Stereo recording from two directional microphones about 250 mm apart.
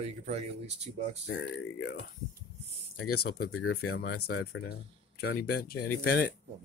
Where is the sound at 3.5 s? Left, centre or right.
Left.